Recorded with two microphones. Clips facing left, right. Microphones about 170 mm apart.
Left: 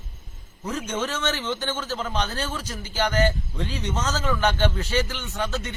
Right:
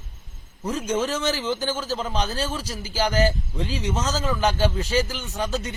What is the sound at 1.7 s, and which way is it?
Speech, 10° right (ahead or behind).